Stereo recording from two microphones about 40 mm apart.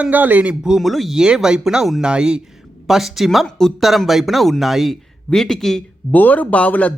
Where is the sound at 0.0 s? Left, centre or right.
Right.